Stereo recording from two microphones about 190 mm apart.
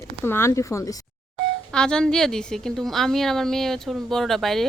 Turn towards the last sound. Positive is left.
turn(degrees=0)  # may be behind; listen again after turning